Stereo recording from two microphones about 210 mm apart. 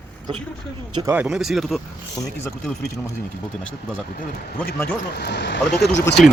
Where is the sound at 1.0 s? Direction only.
5° right (ahead or behind).